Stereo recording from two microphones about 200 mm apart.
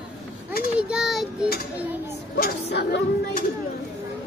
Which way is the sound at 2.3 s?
55° left (ahead or behind).